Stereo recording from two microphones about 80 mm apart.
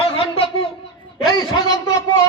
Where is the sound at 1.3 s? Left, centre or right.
Left.